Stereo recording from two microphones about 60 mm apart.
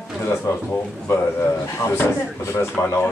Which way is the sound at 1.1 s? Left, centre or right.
Left.